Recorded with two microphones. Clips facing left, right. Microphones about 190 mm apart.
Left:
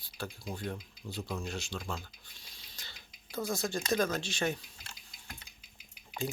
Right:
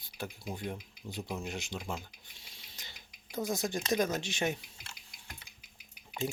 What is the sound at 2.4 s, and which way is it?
Dishes, 20° right (ahead or behind).